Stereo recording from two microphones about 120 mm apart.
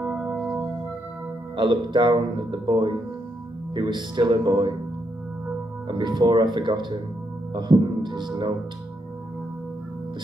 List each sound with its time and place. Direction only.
0.0 s music: 10° right (ahead or behind)
1.6 s speech: 40° right (ahead or behind)
5.9 s speech: 35° right (ahead or behind)